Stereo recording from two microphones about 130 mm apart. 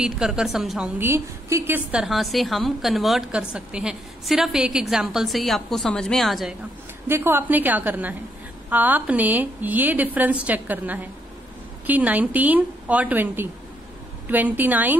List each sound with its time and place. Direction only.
0.0 s a woman's voice: 5° right (ahead or behind)
1.0 s a woman's voice: 20° right (ahead or behind)
1.9 s a woman's voice: 5° right (ahead or behind)
7.1 s a woman's voice: 15° right (ahead or behind)